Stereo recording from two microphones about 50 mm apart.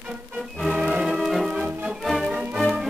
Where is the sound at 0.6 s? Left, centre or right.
Centre.